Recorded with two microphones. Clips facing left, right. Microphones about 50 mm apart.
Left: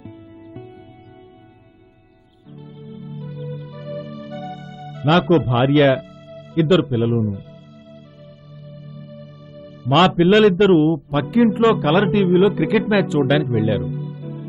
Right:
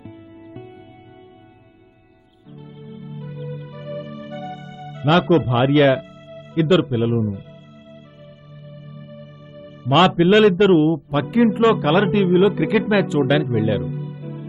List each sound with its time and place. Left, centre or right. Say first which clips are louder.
0.0 s music: left 1 dB; centre
2.8 s music: left 1 dB; centre
5.0 s a man's voice: even; centre
6.2 s music: left 2 dB; right
6.6 s a man's voice: left 1 dB; centre
8.6 s music: left 1 dB; right
9.8 s a man's voice: even; centre
13.8 s music: left 1 dB; centre